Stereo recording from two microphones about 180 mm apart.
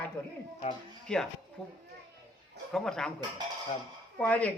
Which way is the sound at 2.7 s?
5° left (ahead or behind).